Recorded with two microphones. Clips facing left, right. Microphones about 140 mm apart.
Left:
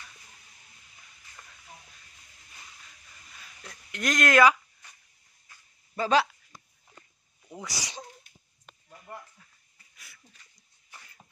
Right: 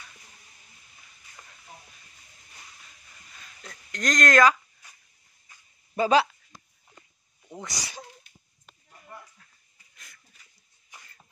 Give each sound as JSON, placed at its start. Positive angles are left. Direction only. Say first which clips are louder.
{"t": 3.6, "sound": "speech", "louder": "right 1 dB", "side_deg": 10}
{"t": 5.9, "sound": "speech", "louder": "right 3 dB", "side_deg": -10}
{"t": 7.4, "sound": "speech", "louder": "right 1 dB", "side_deg": 0}
{"t": 7.8, "sound": "speech", "louder": "even", "side_deg": 15}
{"t": 9.9, "sound": "a sound", "louder": "right 1 dB", "side_deg": 5}
{"t": 10.9, "sound": "a sound", "louder": "even", "side_deg": -15}